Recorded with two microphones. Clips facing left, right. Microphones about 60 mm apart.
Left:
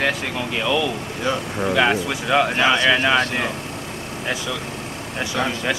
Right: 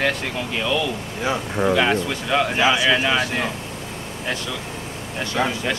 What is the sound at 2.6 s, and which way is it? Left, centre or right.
Speech, centre.